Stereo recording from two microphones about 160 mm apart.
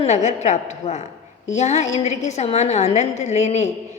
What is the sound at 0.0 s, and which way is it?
A woman's voice, 45° left (ahead or behind).